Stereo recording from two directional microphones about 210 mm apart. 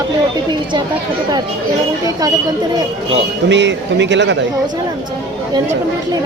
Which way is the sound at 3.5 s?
60° right (ahead or behind).